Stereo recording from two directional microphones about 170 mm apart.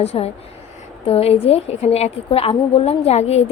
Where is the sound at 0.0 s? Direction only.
40° left (ahead or behind).